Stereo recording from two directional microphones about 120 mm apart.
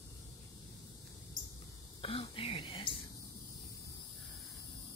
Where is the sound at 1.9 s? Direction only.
50° left (ahead or behind).